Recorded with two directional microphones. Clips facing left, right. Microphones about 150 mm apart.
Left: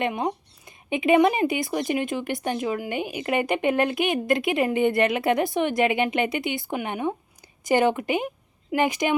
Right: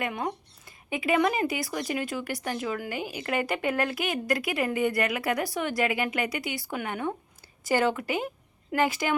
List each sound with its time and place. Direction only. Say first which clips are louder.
0.0 s speech: left 5 dB; 25° left (ahead or behind)